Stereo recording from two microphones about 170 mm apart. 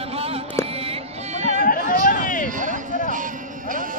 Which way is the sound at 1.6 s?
55° left (ahead or behind).